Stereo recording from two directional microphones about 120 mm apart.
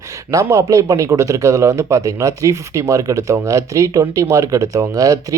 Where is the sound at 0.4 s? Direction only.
25° right (ahead or behind).